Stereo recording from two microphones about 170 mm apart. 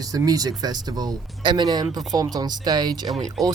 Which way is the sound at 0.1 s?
20° right (ahead or behind).